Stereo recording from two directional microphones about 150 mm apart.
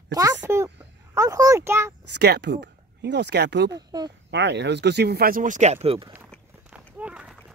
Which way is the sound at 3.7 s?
25° right (ahead or behind).